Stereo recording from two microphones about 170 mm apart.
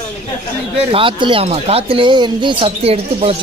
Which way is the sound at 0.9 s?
30° right (ahead or behind).